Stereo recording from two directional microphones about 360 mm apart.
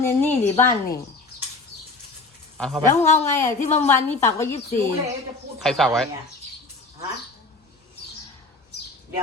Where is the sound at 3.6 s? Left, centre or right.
Centre.